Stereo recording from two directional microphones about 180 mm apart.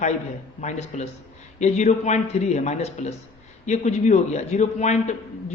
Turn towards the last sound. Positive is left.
turn(degrees=40)  # may be behind; listen again after turning